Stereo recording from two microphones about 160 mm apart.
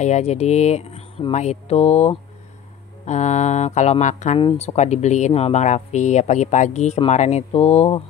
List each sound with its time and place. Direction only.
0.0 s speech: 45° left (ahead or behind)
4.4 s speech: 35° left (ahead or behind)